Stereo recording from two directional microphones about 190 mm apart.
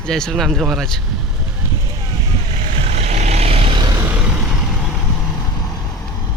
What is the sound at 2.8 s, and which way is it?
Vehicle, 35° right (ahead or behind).